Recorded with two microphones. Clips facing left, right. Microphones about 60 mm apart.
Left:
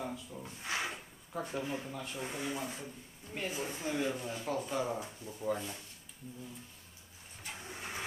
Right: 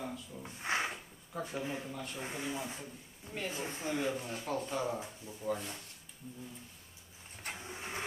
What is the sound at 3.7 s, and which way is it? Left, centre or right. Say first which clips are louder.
Speech: even; right.